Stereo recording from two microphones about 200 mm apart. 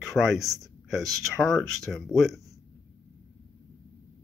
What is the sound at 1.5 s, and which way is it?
Speech, centre (ahead or behind).